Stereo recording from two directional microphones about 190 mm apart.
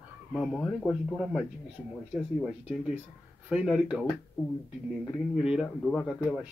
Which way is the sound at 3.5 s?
5° right (ahead or behind).